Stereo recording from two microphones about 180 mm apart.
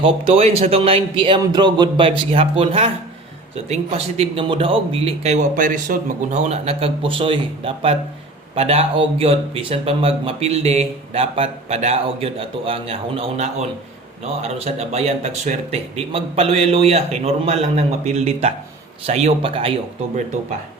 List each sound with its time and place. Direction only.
0.0 s speech: 30° right (ahead or behind)